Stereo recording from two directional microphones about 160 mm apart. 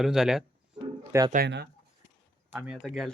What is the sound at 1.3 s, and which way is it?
Speech, 90° right.